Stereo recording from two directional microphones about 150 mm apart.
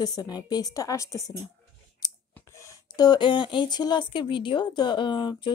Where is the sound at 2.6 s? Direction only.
30° left (ahead or behind).